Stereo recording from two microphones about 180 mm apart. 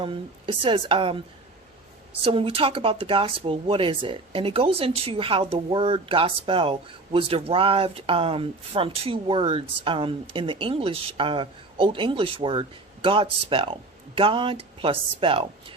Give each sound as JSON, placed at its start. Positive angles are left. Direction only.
{"t": 0.0, "sound": "speech", "side_deg": -30}
{"t": 2.2, "sound": "speech", "side_deg": -30}